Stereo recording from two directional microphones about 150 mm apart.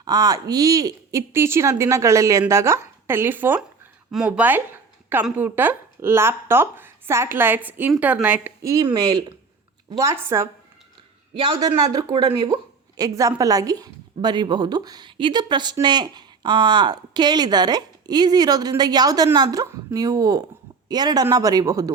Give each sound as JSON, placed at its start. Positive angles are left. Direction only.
{"t": 0.0, "sound": "a woman's voice", "side_deg": -25}
{"t": 11.9, "sound": "a woman's voice", "side_deg": -30}